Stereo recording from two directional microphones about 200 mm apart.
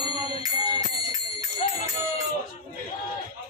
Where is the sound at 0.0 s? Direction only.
20° right (ahead or behind).